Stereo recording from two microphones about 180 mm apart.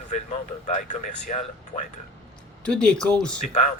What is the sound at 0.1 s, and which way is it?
Speech, 45° left (ahead or behind).